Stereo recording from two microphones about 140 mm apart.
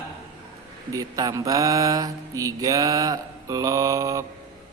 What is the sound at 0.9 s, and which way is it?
Mantra, 25° right (ahead or behind).